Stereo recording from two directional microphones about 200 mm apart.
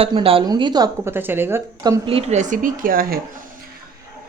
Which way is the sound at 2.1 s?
30° right (ahead or behind).